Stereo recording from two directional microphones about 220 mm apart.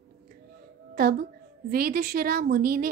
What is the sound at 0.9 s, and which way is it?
A woman's voice, 45° right (ahead or behind).